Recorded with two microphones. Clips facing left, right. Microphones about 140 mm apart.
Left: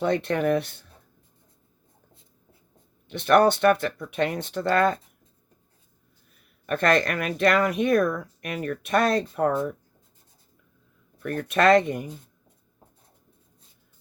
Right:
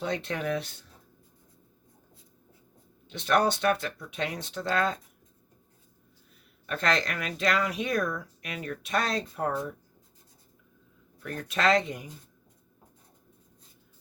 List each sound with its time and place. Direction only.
0.0 s speech: 55° left (ahead or behind)
3.1 s speech: 55° left (ahead or behind)
6.7 s speech: 55° left (ahead or behind)
11.2 s speech: 55° left (ahead or behind)